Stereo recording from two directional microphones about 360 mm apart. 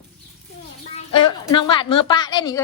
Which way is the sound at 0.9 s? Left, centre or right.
Centre.